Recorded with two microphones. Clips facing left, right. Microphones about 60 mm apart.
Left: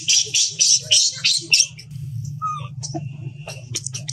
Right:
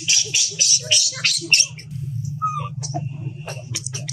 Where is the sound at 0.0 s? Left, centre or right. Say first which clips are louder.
Right 1 dB; right.